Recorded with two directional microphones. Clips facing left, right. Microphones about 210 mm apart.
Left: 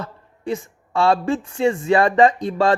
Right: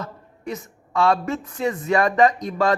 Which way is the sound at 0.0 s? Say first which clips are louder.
Left 2 dB; 30° left (ahead or behind).